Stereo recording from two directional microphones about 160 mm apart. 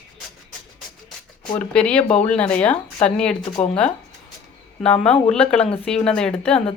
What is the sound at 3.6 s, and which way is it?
Speech, 35° left (ahead or behind).